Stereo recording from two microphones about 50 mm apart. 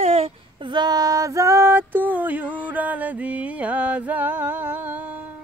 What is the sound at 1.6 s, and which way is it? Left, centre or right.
Mantra, right.